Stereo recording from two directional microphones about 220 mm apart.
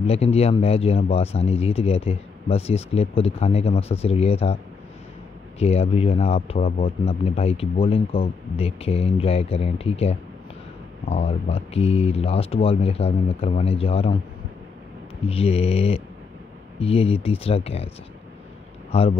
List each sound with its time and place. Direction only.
0.0 s speech: 25° left (ahead or behind)
5.6 s speech: 25° left (ahead or behind)
15.2 s speech: 25° left (ahead or behind)
18.9 s speech: 25° left (ahead or behind)